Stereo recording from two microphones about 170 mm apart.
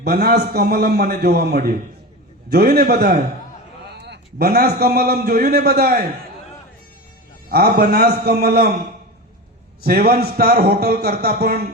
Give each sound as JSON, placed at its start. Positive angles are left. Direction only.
{"t": 0.0, "sound": "a man's voice", "side_deg": -65}
{"t": 4.0, "sound": "a man's voice", "side_deg": -70}
{"t": 7.5, "sound": "a man's voice", "side_deg": -65}
{"t": 9.8, "sound": "a man's voice", "side_deg": -60}